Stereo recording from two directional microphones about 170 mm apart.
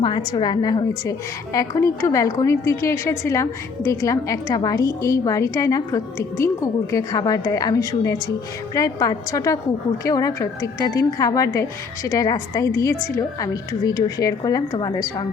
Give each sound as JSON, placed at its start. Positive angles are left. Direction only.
{"t": 0.0, "sound": "a woman's voice", "side_deg": 25}